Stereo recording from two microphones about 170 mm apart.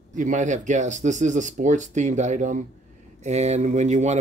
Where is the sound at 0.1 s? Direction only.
45° right (ahead or behind).